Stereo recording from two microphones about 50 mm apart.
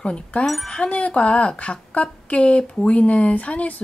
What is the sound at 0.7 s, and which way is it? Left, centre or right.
A woman's voice, left.